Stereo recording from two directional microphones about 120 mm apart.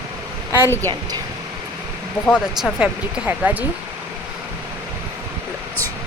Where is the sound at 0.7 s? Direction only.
20° left (ahead or behind).